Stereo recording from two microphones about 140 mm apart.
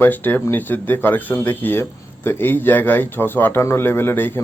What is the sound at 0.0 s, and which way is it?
Speech, 15° left (ahead or behind).